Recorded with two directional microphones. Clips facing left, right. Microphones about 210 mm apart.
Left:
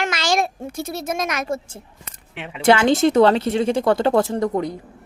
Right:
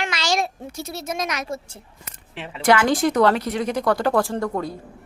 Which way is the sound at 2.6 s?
25° left (ahead or behind).